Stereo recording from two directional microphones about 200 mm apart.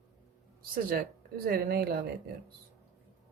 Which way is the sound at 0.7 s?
50° right (ahead or behind).